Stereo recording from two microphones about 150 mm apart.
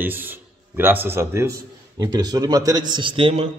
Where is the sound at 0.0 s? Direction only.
15° right (ahead or behind).